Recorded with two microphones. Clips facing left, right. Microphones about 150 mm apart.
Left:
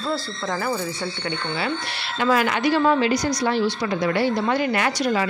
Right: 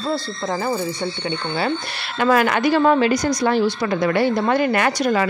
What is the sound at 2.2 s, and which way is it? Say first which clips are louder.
A woman's voice: right 3 dB; 55° right (ahead or behind).